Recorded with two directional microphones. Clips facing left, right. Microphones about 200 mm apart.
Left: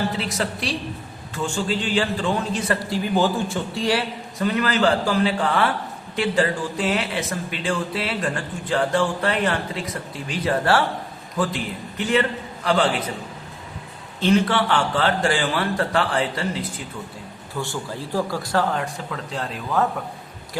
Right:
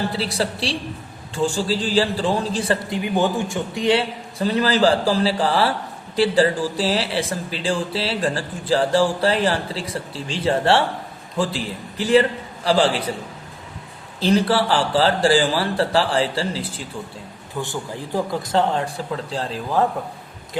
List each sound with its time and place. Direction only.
0.1 s speech: 35° right (ahead or behind)
2.9 s speech: 15° right (ahead or behind)
14.2 s speech: 35° right (ahead or behind)
17.6 s speech: 15° right (ahead or behind)